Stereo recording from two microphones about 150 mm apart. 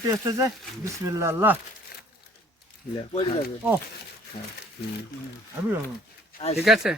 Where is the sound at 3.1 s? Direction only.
40° left (ahead or behind).